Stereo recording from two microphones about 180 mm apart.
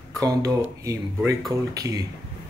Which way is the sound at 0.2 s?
20° right (ahead or behind).